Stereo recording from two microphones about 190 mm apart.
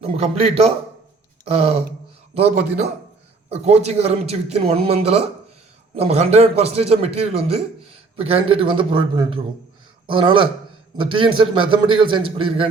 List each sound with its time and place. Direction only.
0.0 s a man's voice: 35° right (ahead or behind)